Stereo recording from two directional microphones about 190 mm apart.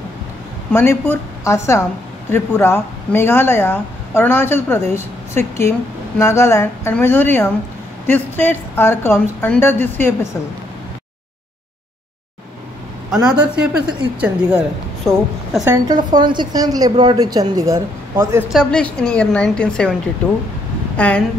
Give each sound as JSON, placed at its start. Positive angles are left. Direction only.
{"t": 0.7, "sound": "a woman's voice", "side_deg": 10}
{"t": 13.1, "sound": "speech", "side_deg": -5}
{"t": 15.6, "sound": "a woman's voice", "side_deg": -20}
{"t": 18.5, "sound": "speech", "side_deg": 5}
{"t": 20.9, "sound": "speech", "side_deg": 10}